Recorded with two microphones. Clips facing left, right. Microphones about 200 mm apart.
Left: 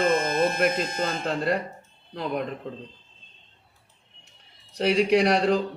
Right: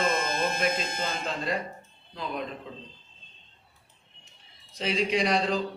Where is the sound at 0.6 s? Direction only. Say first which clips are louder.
Left 5 dB; 50° left (ahead or behind).